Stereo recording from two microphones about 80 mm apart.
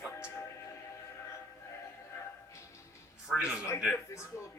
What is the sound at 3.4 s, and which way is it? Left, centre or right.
Speech, centre.